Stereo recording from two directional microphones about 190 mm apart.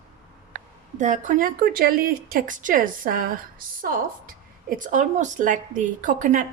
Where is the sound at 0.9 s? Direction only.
40° right (ahead or behind).